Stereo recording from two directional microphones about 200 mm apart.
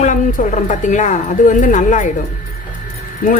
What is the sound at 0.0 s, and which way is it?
Speech, 40° left (ahead or behind).